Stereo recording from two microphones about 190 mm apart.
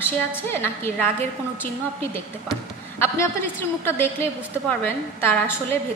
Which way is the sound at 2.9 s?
10° left (ahead or behind).